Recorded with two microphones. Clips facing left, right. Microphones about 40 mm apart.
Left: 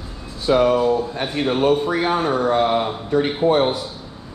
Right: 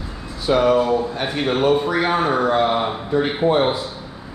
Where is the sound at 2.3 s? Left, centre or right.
Right.